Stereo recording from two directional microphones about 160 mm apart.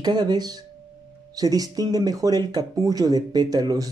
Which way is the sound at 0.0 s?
25° right (ahead or behind).